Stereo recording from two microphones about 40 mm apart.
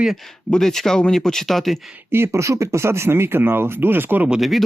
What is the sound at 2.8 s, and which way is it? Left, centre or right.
Speech, right.